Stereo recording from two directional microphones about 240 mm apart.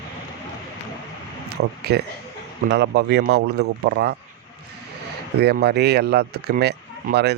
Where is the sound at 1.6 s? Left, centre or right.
Right.